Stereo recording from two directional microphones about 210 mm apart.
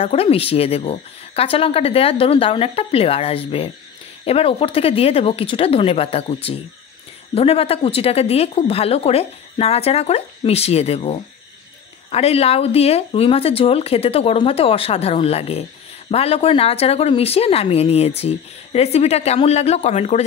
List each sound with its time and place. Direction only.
0.0 s speech: 30° left (ahead or behind)